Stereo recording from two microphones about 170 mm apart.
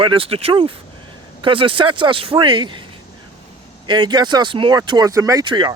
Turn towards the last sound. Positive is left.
turn(degrees=-30)  # may be behind; listen again after turning